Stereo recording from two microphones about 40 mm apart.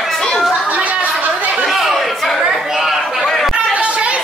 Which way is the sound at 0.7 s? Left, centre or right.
Right.